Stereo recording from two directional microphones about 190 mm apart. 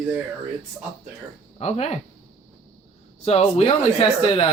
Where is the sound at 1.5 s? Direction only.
35° left (ahead or behind).